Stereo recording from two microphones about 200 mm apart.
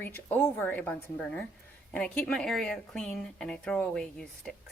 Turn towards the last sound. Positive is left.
turn(degrees=5)  # may be behind; listen again after turning